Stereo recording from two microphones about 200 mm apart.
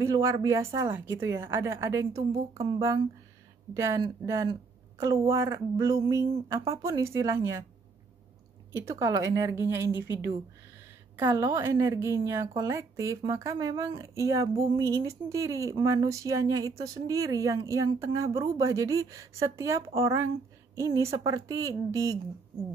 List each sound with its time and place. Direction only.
0.0 s speech: 15° right (ahead or behind)
8.7 s speech: 15° right (ahead or behind)
11.1 s speech: 15° right (ahead or behind)